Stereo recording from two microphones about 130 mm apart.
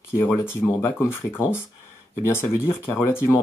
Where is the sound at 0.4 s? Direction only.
20° left (ahead or behind).